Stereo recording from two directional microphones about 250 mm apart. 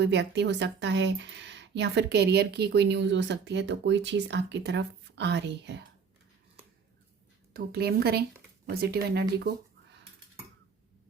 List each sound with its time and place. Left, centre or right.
0.0 s speech: right
7.5 s a woman's voice: right